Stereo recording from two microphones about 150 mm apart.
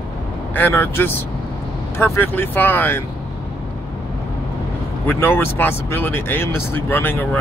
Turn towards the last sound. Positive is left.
turn(degrees=15)  # may be behind; listen again after turning